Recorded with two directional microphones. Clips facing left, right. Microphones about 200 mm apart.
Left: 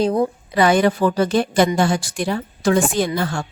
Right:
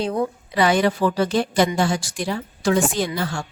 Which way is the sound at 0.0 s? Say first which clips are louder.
Left 5 dB; 35° left (ahead or behind).